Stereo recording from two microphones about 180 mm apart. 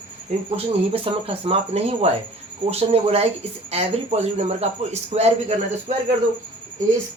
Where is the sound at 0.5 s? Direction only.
30° right (ahead or behind).